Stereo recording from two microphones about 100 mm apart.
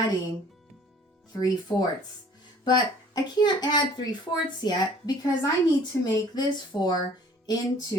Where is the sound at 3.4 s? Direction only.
45° left (ahead or behind).